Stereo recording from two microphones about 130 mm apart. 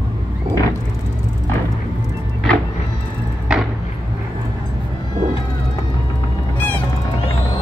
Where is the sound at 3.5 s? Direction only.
5° right (ahead or behind).